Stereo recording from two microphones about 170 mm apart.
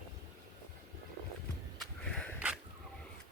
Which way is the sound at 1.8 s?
5° left (ahead or behind).